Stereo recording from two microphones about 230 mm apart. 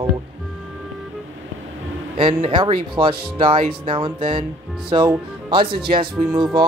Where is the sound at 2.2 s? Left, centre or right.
Right.